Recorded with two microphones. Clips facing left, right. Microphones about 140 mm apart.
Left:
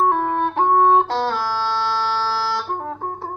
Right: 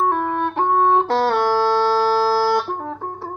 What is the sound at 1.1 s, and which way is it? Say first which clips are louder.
Music: right 5 dB; 60° right (ahead or behind).